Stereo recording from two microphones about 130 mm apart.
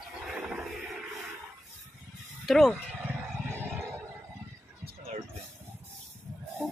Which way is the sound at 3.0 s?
15° right (ahead or behind).